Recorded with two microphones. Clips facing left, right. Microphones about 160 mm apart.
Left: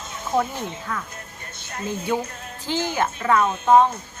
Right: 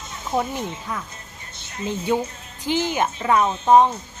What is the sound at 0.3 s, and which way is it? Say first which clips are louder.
Speech: left 1 dB; 15° right (ahead or behind).